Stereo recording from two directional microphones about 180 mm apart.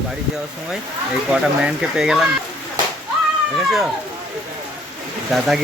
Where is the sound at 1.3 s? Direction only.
5° right (ahead or behind).